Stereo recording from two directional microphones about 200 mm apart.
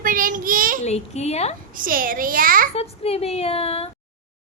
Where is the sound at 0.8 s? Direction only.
35° left (ahead or behind).